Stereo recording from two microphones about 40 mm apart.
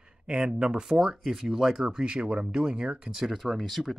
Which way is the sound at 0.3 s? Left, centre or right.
Centre.